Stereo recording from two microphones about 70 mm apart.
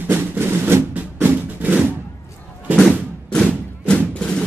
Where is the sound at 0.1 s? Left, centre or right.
Right.